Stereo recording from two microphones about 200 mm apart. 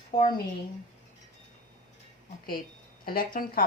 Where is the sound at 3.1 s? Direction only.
45° left (ahead or behind).